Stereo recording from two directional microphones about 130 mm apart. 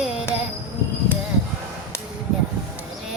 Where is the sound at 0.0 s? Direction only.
5° right (ahead or behind).